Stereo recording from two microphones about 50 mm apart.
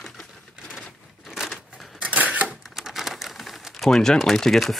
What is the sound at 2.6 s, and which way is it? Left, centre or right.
Typewriter, centre.